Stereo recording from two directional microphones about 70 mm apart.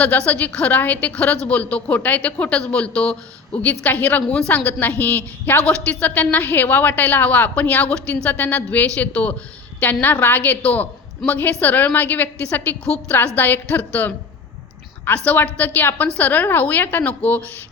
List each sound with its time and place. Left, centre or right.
0.0 s a woman's voice: left
8.1 s a woman's voice: left
15.2 s a woman's voice: left